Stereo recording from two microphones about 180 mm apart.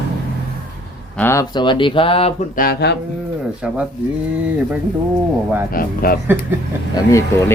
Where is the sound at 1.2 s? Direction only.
15° left (ahead or behind).